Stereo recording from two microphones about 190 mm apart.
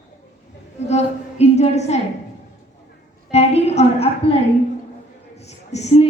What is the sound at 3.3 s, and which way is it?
A woman's voice, 35° left (ahead or behind).